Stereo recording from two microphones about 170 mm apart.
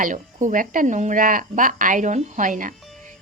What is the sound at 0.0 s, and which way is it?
Speech, 50° right (ahead or behind).